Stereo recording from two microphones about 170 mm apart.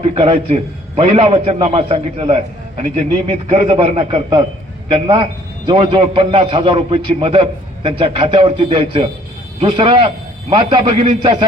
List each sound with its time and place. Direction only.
0.0 s a man's voice: 35° right (ahead or behind)